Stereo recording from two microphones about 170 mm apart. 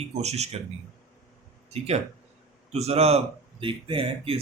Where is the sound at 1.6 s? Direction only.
40° right (ahead or behind).